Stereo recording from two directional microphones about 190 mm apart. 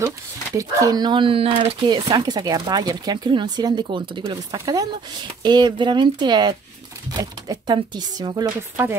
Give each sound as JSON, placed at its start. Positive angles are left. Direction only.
{"t": 0.6, "sound": "speech", "side_deg": -15}